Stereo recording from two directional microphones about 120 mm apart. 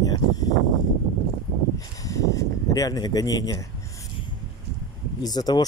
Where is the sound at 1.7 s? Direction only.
25° left (ahead or behind).